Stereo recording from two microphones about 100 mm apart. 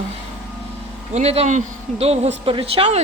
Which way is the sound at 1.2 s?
90° right.